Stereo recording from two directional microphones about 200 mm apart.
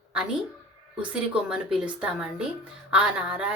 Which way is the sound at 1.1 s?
5° right (ahead or behind).